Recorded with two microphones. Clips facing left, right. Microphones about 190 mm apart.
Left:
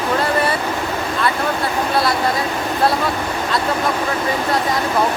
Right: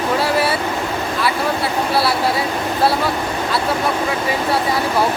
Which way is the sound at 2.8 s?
5° right (ahead or behind).